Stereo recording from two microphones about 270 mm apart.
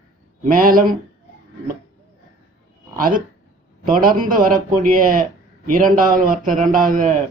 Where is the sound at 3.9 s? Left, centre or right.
Right.